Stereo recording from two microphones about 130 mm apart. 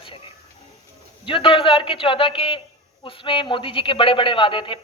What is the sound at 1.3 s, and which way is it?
A man's voice, 45° left (ahead or behind).